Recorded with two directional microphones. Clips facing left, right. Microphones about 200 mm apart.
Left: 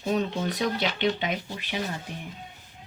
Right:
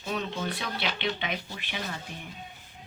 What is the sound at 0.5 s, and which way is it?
Speech, 40° left (ahead or behind).